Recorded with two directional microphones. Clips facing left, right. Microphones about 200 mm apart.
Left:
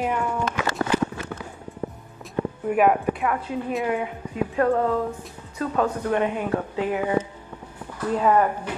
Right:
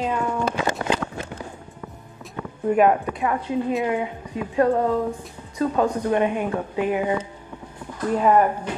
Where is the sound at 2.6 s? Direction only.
10° left (ahead or behind).